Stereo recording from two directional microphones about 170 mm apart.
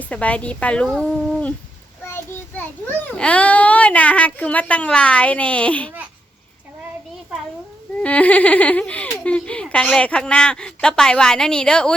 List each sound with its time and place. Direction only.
0.1 s speech: 5° left (ahead or behind)
2.1 s child singing: 15° left (ahead or behind)
3.2 s speech: 5° left (ahead or behind)
8.0 s speech: 10° left (ahead or behind)